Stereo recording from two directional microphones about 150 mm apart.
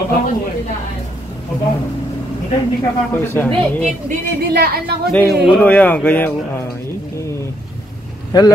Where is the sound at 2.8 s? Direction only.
15° left (ahead or behind).